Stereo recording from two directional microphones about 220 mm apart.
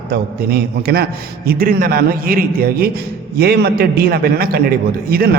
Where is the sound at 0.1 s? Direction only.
45° right (ahead or behind).